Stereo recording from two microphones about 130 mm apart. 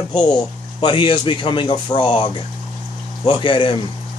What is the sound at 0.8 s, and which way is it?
Speech, 40° left (ahead or behind).